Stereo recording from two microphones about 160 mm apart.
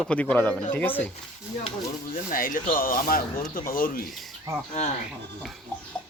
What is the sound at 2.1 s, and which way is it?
Speech, 60° left (ahead or behind).